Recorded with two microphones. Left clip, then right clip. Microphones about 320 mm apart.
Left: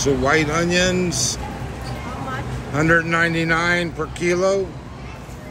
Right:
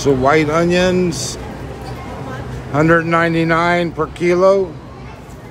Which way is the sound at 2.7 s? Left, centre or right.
Centre.